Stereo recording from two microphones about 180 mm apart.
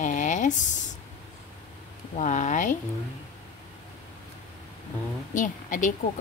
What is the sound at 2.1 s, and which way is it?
Speech, 45° left (ahead or behind).